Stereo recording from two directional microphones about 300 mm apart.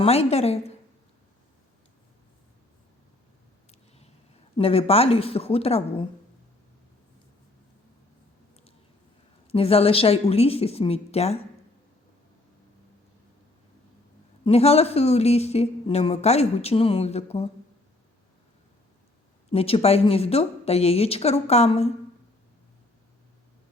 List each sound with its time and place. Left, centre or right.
0.0 s speech: centre
3.7 s a sound: left
4.5 s speech: centre
9.5 s speech: centre
14.4 s speech: centre
19.5 s speech: centre